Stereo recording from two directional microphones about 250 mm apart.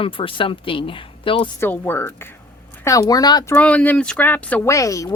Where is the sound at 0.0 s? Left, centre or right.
Left.